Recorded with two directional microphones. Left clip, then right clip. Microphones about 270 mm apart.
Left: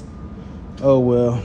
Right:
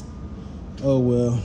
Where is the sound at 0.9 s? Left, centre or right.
Centre.